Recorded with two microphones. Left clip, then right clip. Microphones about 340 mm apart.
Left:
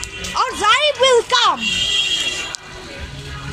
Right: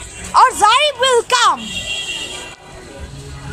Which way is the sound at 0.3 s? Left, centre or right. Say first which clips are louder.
Right 6 dB; centre.